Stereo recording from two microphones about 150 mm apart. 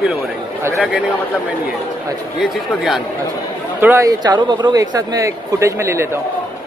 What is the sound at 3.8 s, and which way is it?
A man's voice, 20° right (ahead or behind).